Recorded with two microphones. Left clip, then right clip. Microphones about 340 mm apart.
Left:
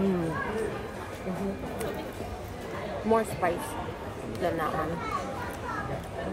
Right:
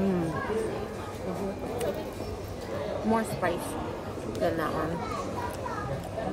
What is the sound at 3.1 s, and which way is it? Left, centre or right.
Speech, centre.